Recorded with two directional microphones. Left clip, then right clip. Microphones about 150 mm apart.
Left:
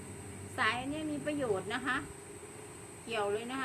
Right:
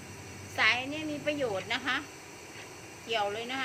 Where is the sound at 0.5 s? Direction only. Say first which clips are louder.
Right 6 dB; 15° left (ahead or behind).